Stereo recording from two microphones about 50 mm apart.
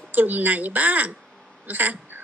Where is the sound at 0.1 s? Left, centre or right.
Right.